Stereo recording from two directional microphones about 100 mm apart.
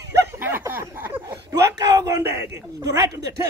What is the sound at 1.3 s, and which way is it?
Speech, 35° right (ahead or behind).